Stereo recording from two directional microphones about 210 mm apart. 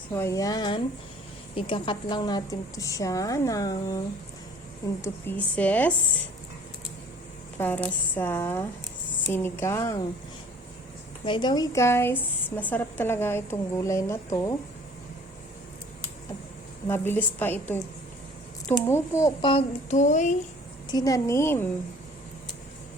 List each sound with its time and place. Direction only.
0.1 s a woman's voice: 15° left (ahead or behind)
5.0 s a woman's voice: 10° left (ahead or behind)
7.6 s a woman's voice: 10° left (ahead or behind)
11.3 s a woman's voice: 20° left (ahead or behind)
16.9 s a woman's voice: 10° left (ahead or behind)
18.9 s speech: 10° left (ahead or behind); by 20.3 s 35° left (ahead or behind)
20.9 s a woman's voice: 15° left (ahead or behind)